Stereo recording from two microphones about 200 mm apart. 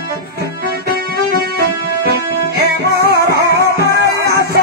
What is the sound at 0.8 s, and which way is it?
Music, 50° right (ahead or behind).